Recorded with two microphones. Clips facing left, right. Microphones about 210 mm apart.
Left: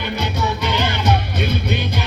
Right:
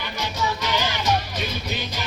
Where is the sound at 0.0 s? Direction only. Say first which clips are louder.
Left 5 dB; 60° left (ahead or behind).